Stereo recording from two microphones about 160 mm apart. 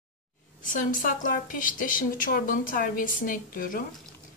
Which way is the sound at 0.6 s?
55° left (ahead or behind).